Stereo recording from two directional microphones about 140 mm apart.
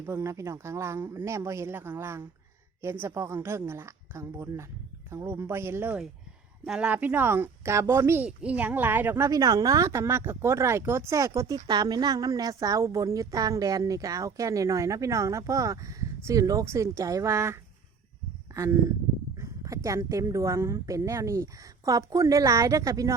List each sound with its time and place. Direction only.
0.0 s a woman's voice: 15° right (ahead or behind)